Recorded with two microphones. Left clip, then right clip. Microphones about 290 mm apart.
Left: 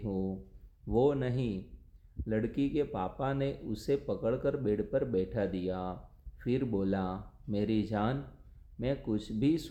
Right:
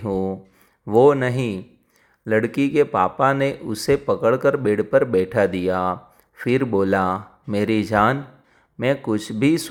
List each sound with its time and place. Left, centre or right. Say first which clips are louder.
0.9 s speech: right 14 dB; right